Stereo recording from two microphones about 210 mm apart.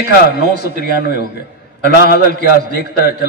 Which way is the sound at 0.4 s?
45° left (ahead or behind).